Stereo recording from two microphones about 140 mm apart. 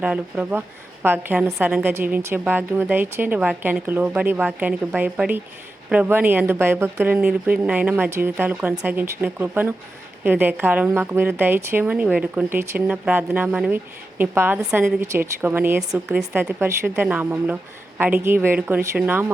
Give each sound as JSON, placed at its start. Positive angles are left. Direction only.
{"t": 0.0, "sound": "a woman's voice", "side_deg": -10}
{"t": 15.0, "sound": "a woman's voice", "side_deg": -20}
{"t": 16.3, "sound": "a woman's voice", "side_deg": -15}